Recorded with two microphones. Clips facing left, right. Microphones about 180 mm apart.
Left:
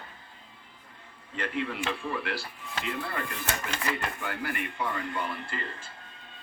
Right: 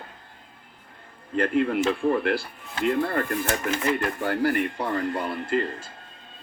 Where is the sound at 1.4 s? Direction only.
50° right (ahead or behind).